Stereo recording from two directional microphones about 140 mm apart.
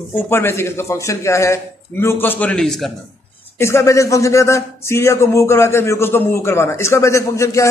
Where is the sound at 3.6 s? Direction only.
20° left (ahead or behind).